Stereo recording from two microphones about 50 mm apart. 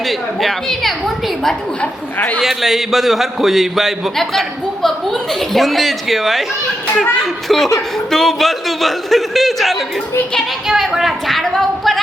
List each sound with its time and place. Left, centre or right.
0.1 s a man's voice: centre
1.8 s speech: left
2.4 s a man's voice: centre
7.4 s a man's voice: centre